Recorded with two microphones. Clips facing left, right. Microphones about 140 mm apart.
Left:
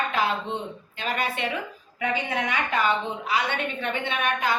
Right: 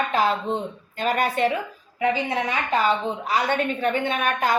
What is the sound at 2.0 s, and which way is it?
A woman's voice, 35° right (ahead or behind).